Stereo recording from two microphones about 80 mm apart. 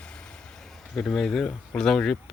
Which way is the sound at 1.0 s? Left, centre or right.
Centre.